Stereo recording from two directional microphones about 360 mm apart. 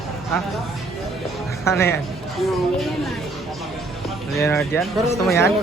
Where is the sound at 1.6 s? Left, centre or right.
Centre.